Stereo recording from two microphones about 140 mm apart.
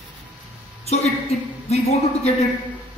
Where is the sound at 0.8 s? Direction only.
50° left (ahead or behind).